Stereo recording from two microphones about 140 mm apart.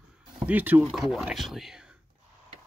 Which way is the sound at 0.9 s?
Centre (ahead or behind).